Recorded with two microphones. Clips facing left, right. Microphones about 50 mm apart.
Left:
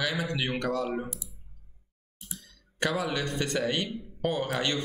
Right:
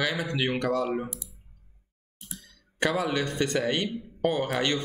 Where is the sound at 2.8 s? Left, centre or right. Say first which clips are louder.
Right 3 dB; centre.